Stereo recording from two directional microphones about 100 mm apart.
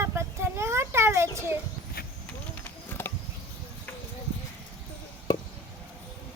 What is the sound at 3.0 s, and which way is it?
Insect, 20° left (ahead or behind).